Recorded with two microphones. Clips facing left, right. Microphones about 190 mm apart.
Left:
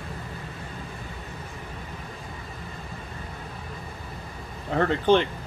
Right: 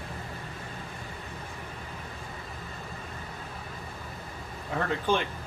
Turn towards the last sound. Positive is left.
turn(degrees=75)  # may be behind; listen again after turning